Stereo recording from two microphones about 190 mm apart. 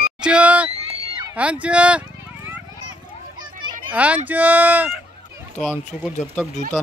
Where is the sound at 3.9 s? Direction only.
5° right (ahead or behind).